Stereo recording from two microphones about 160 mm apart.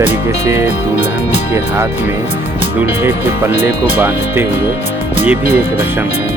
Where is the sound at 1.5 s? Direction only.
15° right (ahead or behind).